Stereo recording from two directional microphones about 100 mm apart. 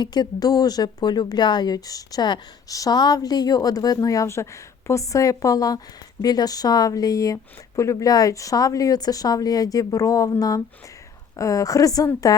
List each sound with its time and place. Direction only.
0.0 s speech: 45° left (ahead or behind)
11.3 s speech: 35° left (ahead or behind)